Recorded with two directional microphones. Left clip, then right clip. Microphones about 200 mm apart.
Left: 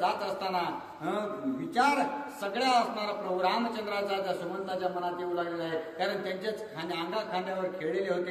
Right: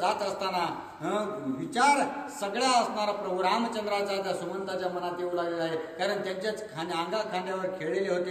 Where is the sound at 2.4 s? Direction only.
15° right (ahead or behind).